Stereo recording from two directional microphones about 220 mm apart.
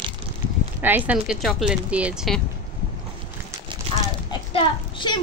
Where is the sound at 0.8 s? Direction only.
10° right (ahead or behind).